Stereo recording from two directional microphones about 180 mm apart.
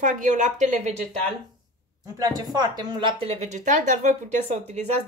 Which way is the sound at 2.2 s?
20° right (ahead or behind).